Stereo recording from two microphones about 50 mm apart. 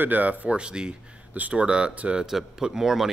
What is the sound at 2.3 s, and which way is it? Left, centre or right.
Speech, centre.